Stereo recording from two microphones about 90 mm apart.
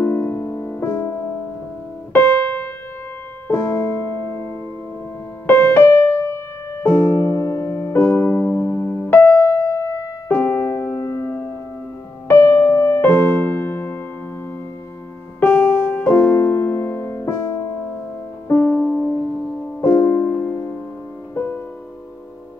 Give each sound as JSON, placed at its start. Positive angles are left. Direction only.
{"t": 0.0, "sound": "music", "side_deg": 30}
{"t": 2.1, "sound": "keyboard", "side_deg": 20}
{"t": 5.5, "sound": "keyboard", "side_deg": 25}
{"t": 6.3, "sound": "music", "side_deg": 30}
{"t": 10.3, "sound": "music", "side_deg": 15}
{"t": 10.7, "sound": "music", "side_deg": 25}
{"t": 15.4, "sound": "music", "side_deg": 15}
{"t": 18.8, "sound": "music", "side_deg": 5}
{"t": 19.8, "sound": "music", "side_deg": 25}